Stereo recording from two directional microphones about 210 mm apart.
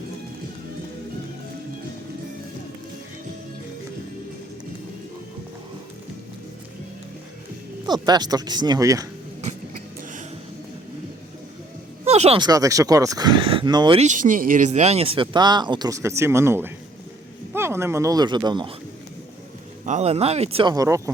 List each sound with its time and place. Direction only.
7.9 s speech: 20° right (ahead or behind)
12.0 s speech: 30° right (ahead or behind)
19.8 s speech: 30° right (ahead or behind); by 21.0 s 15° right (ahead or behind)